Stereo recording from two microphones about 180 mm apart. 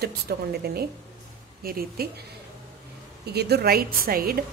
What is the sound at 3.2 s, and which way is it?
A woman's voice, 65° right (ahead or behind).